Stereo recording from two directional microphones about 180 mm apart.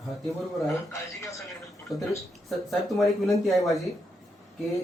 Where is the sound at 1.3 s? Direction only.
Centre (ahead or behind).